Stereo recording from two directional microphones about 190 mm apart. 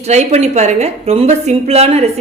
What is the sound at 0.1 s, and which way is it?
Speech, 35° right (ahead or behind).